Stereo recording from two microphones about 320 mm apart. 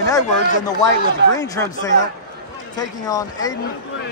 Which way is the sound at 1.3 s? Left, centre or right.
Centre.